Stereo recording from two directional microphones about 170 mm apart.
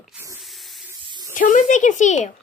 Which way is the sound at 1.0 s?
25° right (ahead or behind).